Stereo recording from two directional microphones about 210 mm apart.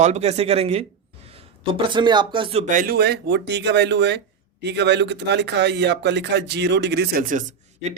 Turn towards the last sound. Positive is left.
turn(degrees=-40)  # may be behind; listen again after turning